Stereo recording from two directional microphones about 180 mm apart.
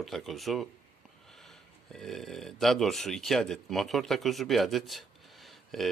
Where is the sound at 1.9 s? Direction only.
Centre (ahead or behind).